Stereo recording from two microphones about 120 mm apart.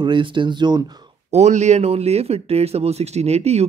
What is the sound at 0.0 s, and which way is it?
Speech, 40° right (ahead or behind).